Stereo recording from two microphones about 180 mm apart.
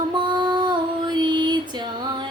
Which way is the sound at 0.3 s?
25° right (ahead or behind).